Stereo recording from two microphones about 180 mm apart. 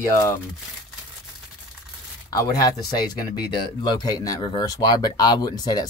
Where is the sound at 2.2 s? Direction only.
20° left (ahead or behind).